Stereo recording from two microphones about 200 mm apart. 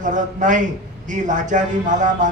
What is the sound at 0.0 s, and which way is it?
Speech, 40° right (ahead or behind).